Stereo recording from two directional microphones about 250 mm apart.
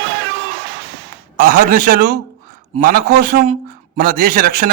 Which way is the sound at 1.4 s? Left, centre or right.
Right.